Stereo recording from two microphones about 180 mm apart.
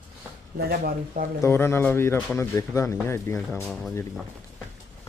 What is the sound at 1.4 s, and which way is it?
Speech, 15° left (ahead or behind).